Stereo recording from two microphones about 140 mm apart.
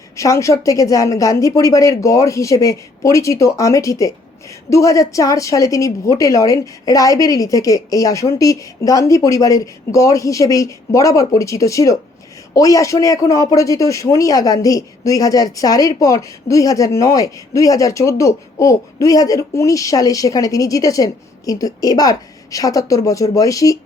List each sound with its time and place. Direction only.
0.2 s a man's voice: 20° left (ahead or behind)